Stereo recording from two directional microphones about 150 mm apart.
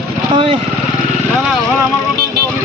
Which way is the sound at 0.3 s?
35° right (ahead or behind).